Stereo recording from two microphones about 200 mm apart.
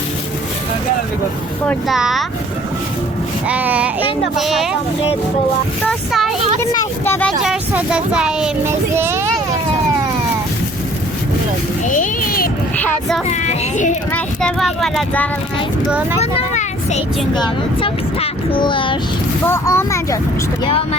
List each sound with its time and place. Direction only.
1.6 s speech: centre (ahead or behind)
3.4 s speech: 5° right (ahead or behind)
5.9 s speech: centre (ahead or behind)
6.6 s speech: 10° left (ahead or behind); by 9.2 s 10° right (ahead or behind)
11.9 s a sound: 45° left (ahead or behind)
12.7 s speech: 5° left (ahead or behind)
13.2 s speech: 35° left (ahead or behind)
14.1 s speech: 5° left (ahead or behind)
16.2 s vehicle: 35° left (ahead or behind)
17.3 s speech: 25° left (ahead or behind)
19.5 s speech: 15° left (ahead or behind)